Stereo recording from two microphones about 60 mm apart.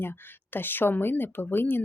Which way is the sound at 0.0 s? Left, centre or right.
Left.